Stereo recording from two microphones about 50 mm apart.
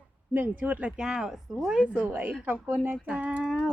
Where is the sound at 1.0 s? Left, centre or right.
Centre.